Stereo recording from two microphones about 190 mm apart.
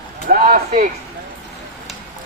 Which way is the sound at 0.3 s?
50° right (ahead or behind).